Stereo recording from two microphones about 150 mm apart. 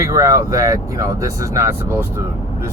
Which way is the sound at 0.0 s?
20° right (ahead or behind).